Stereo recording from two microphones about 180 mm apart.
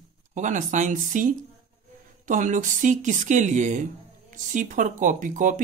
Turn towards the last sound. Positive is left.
turn(degrees=-45)  # may be behind; listen again after turning